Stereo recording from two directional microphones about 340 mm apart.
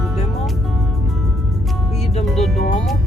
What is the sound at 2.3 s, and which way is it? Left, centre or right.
Music, centre.